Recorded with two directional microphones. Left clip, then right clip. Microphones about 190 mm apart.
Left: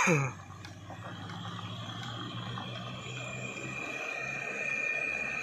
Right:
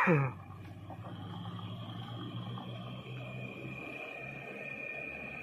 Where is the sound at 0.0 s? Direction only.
10° left (ahead or behind).